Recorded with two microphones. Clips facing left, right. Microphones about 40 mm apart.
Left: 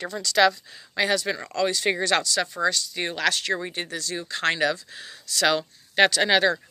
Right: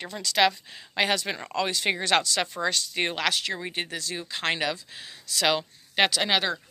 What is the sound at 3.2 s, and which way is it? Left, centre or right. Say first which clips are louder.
Speech: left 3 dB; centre.